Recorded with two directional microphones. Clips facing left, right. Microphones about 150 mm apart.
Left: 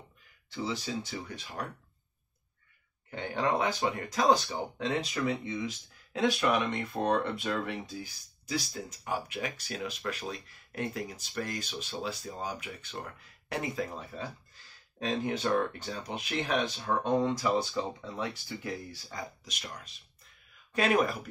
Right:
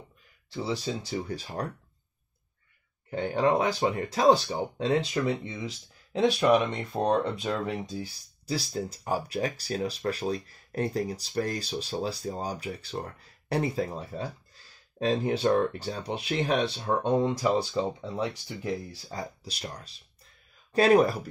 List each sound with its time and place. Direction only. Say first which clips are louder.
0.5 s speech: right 4 dB; 35° right (ahead or behind)
3.1 s speech: right 6 dB; 30° right (ahead or behind)
19.0 s speech: right 4 dB; 35° right (ahead or behind)